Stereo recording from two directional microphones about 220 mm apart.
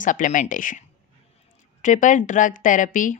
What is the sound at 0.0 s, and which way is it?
A woman's voice, 35° left (ahead or behind).